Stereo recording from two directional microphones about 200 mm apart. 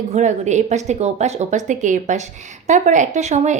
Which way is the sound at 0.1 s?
35° right (ahead or behind).